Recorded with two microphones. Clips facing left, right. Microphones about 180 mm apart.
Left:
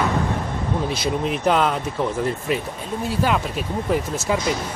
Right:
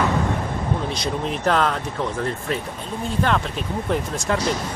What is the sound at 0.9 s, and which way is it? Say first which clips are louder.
Speech: left 2 dB; 5° left (ahead or behind).